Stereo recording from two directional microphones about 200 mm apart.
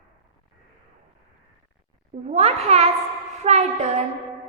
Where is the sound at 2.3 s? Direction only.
30° right (ahead or behind).